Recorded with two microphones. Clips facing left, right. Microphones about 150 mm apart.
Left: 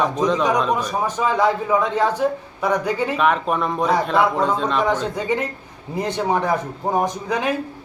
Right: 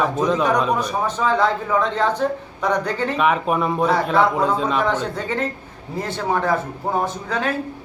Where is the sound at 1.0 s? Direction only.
10° left (ahead or behind).